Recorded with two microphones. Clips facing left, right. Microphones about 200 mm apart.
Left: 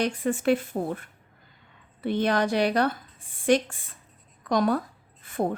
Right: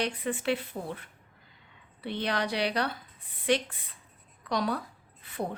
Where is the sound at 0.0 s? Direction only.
45° left (ahead or behind).